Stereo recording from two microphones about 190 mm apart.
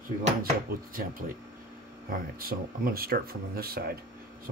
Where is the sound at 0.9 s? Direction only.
50° right (ahead or behind).